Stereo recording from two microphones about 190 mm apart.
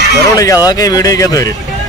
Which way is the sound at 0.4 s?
20° left (ahead or behind).